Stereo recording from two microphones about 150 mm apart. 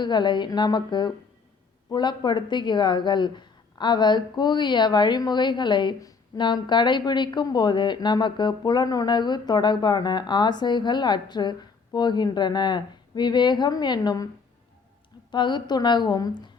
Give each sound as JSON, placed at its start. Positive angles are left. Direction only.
{"t": 0.0, "sound": "a woman's voice", "side_deg": 30}
{"t": 15.3, "sound": "speech", "side_deg": 30}